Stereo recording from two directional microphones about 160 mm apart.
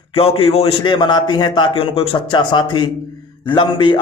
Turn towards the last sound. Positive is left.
turn(degrees=30)  # may be behind; listen again after turning